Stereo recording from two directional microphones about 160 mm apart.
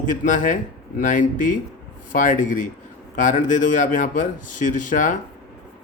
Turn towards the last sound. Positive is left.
turn(degrees=50)  # may be behind; listen again after turning